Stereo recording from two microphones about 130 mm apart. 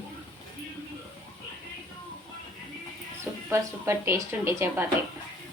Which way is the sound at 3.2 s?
20° right (ahead or behind).